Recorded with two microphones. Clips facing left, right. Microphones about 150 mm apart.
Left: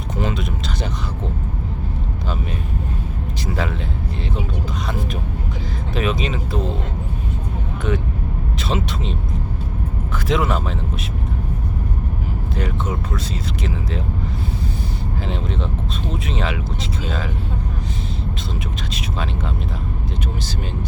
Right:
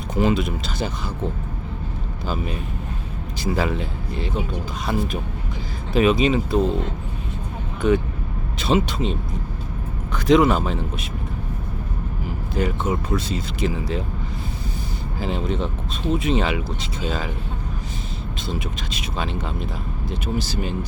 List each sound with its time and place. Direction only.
0.2 s speech: 5° right (ahead or behind)
2.2 s speech: centre (ahead or behind)
5.9 s speech: centre (ahead or behind)
7.8 s speech: centre (ahead or behind)
10.2 s speech: centre (ahead or behind)
12.5 s speech: 5° right (ahead or behind)
15.2 s speech: centre (ahead or behind)